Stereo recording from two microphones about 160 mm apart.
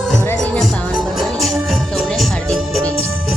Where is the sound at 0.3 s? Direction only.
5° left (ahead or behind).